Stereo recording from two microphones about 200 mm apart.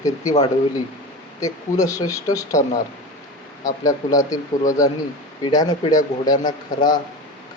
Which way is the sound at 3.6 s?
15° left (ahead or behind).